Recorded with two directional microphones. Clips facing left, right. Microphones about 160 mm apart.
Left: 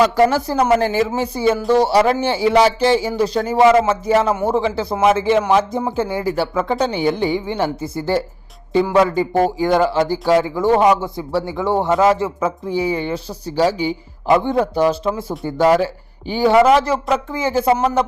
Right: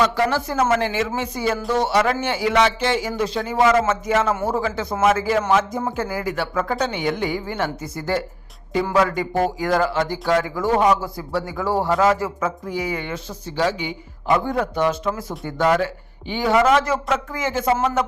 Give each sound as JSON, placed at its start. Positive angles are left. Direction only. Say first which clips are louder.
{"t": 0.0, "sound": "speech", "louder": "left 5 dB", "side_deg": 40}
{"t": 3.6, "sound": "speech", "louder": "left 5 dB", "side_deg": 25}